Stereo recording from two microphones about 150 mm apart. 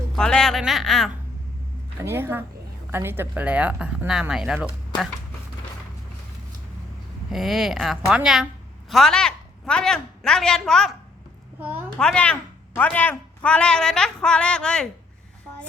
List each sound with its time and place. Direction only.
0.2 s a woman's voice: 5° left (ahead or behind)
2.0 s speech: 15° right (ahead or behind)
7.3 s a woman's voice: centre (ahead or behind)
11.9 s a woman's voice: 5° left (ahead or behind)